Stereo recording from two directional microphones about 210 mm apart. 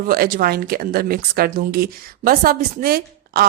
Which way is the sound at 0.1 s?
45° right (ahead or behind).